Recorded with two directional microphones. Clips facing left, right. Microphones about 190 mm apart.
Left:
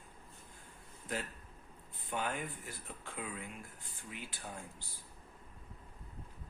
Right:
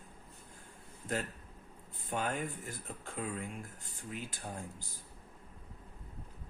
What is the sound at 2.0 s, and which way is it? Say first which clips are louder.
Speech: right 3 dB; 45° right (ahead or behind).